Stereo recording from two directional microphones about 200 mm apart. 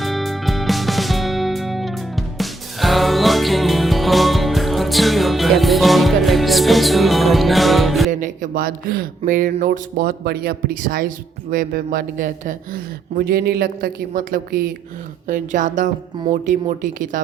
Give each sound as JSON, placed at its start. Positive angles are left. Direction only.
{"t": 0.0, "sound": "music", "side_deg": 0}
{"t": 8.1, "sound": "a woman's voice", "side_deg": -40}